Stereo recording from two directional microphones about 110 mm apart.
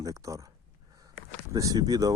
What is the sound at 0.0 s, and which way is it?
Speech, 30° right (ahead or behind).